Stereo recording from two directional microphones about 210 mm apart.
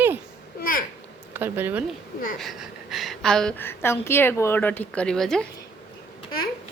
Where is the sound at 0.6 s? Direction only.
40° left (ahead or behind).